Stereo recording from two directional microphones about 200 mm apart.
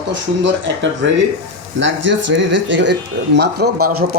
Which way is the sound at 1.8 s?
65° right (ahead or behind).